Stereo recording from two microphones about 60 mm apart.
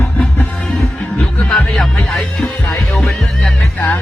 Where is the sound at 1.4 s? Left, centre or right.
Centre.